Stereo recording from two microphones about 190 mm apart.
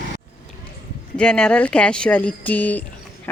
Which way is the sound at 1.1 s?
5° left (ahead or behind).